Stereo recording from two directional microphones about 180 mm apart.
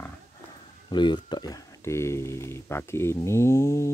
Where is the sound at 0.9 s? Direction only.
25° left (ahead or behind).